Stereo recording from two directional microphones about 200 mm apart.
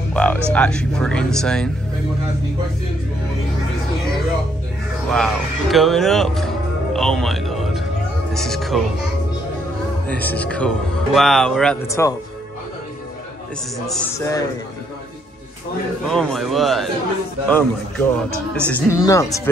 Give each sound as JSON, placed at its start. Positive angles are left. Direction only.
{"t": 0.1, "sound": "speech", "side_deg": 5}
{"t": 5.1, "sound": "speech", "side_deg": 0}
{"t": 10.0, "sound": "speech", "side_deg": 10}
{"t": 11.9, "sound": "speech", "side_deg": 15}
{"t": 14.1, "sound": "speech", "side_deg": 15}
{"t": 16.1, "sound": "speech", "side_deg": 0}